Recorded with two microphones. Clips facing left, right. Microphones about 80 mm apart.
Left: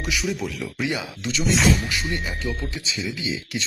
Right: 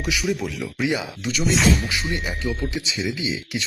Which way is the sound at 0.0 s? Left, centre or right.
Centre.